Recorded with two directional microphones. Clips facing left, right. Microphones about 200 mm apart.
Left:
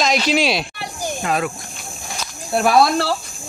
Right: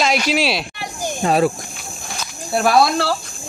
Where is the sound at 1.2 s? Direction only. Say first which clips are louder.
Right 6 dB; 35° right (ahead or behind).